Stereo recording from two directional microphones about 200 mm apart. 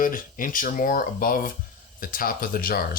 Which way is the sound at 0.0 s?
45° left (ahead or behind).